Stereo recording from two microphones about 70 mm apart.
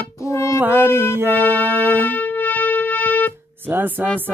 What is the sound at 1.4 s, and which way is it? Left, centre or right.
Music, left.